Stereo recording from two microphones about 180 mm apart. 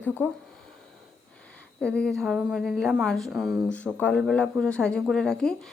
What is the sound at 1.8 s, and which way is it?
A woman's voice, 5° left (ahead or behind).